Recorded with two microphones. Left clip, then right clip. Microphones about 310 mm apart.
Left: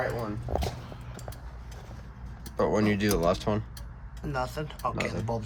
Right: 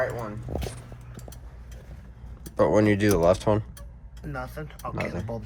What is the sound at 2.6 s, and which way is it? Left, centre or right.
Speech, right.